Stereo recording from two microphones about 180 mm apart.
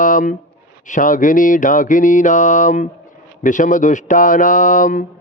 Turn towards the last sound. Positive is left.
turn(degrees=45)  # may be behind; listen again after turning